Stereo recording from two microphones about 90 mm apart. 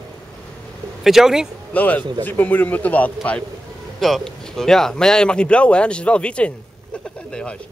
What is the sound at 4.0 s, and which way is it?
Speech, 5° left (ahead or behind).